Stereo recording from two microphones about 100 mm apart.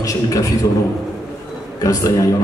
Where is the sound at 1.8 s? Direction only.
35° left (ahead or behind).